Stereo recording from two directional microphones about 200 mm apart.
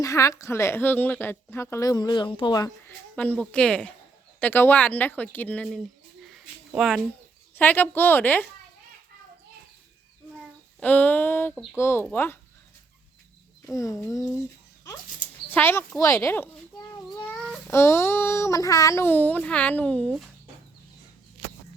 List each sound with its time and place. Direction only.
0.0 s speech: 15° left (ahead or behind)
3.2 s speech: 10° left (ahead or behind)
10.3 s child singing: 5° left (ahead or behind)
11.5 s speech: centre (ahead or behind)
11.8 s speech: 10° left (ahead or behind)
13.7 s speech: 15° left (ahead or behind)
15.5 s a sound: 10° left (ahead or behind)
17.7 s speech: 15° left (ahead or behind)